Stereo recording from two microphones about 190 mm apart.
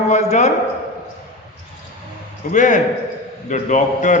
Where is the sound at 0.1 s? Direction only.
35° left (ahead or behind).